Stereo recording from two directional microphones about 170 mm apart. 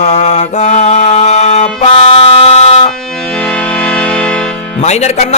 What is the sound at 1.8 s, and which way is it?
Buzzer, 35° left (ahead or behind).